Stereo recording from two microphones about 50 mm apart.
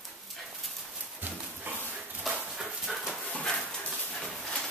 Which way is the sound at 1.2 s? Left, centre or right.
Right.